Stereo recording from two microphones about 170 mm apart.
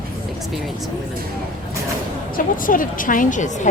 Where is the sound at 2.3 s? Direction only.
55° left (ahead or behind).